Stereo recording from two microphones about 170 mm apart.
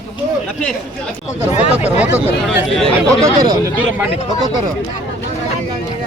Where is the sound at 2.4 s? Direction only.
Centre (ahead or behind).